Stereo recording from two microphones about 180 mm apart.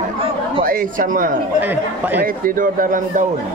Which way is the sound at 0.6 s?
50° right (ahead or behind).